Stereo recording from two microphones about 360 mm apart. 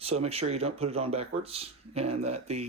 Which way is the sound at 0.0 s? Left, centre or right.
Centre.